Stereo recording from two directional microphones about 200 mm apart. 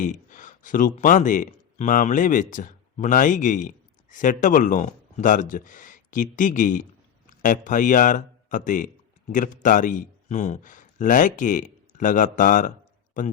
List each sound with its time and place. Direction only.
0.0 s a man's voice: 40° left (ahead or behind)